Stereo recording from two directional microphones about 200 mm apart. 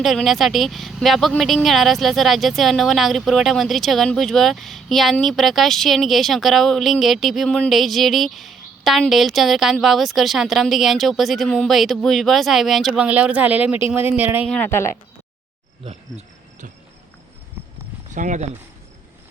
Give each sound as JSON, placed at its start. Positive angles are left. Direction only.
{"t": 0.0, "sound": "speech", "side_deg": 0}
{"t": 14.5, "sound": "speech", "side_deg": 10}
{"t": 15.8, "sound": "cricket", "side_deg": -35}
{"t": 18.1, "sound": "speech", "side_deg": -40}